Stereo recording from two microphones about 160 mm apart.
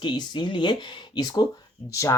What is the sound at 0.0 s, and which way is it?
Speech, 30° left (ahead or behind).